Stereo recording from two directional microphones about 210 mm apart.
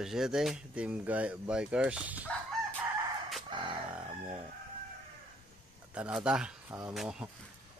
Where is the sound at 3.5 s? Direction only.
20° right (ahead or behind).